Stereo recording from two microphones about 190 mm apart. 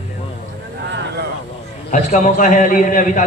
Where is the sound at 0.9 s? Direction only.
65° right (ahead or behind).